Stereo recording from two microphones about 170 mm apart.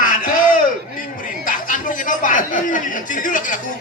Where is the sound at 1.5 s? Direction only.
50° left (ahead or behind).